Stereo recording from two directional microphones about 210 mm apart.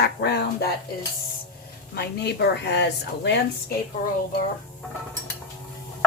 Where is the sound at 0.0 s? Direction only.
50° left (ahead or behind).